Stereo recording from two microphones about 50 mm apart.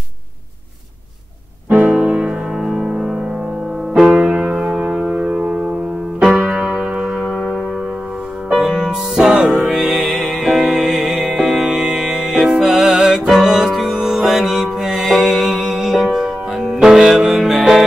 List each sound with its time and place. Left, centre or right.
1.7 s music: right
2.0 s music: right
4.6 s a sound: centre
6.2 s music: centre
7.2 s music: centre
8.9 s music: centre